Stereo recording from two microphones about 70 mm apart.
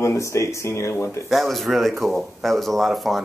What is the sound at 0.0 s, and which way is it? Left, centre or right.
Speech, left.